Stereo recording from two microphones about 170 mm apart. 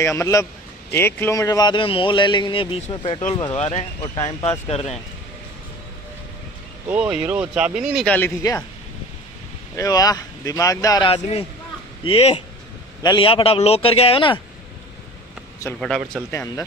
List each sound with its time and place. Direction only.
0.0 s a man's voice: 15° left (ahead or behind); by 4.9 s 40° left (ahead or behind)
6.9 s speech: 5° right (ahead or behind)
8.1 s speech: 15° left (ahead or behind)
9.8 s speech: 20° left (ahead or behind)
11.1 s a man's voice: 35° left (ahead or behind)
16.3 s speech: 15° left (ahead or behind)